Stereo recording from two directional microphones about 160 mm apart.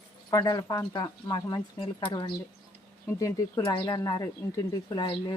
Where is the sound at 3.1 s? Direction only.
20° left (ahead or behind).